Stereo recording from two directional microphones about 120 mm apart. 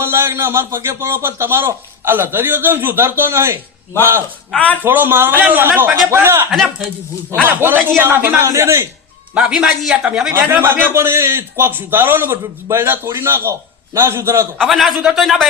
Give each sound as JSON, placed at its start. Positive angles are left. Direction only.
{"t": 0.0, "sound": "a man's voice", "side_deg": -20}
{"t": 4.5, "sound": "speech", "side_deg": 10}
{"t": 4.8, "sound": "a man's voice", "side_deg": -15}
{"t": 6.5, "sound": "a man's voice", "side_deg": 0}
{"t": 7.4, "sound": "a man's voice", "side_deg": -20}
{"t": 9.3, "sound": "a man's voice", "side_deg": -5}
{"t": 10.3, "sound": "a man's voice", "side_deg": -20}
{"t": 14.6, "sound": "a man's voice", "side_deg": 0}